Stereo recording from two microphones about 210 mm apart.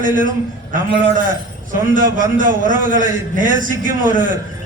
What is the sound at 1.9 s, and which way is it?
A man's voice, 40° right (ahead or behind).